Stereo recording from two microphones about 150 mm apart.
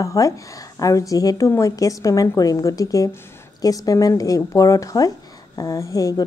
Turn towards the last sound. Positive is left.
turn(degrees=25)  # may be behind; listen again after turning